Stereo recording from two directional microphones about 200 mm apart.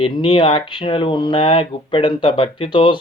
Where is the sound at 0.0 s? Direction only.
25° left (ahead or behind).